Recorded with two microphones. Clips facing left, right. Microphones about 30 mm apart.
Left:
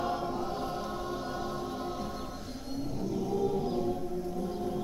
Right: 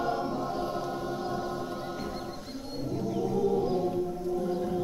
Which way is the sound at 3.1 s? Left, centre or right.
Centre.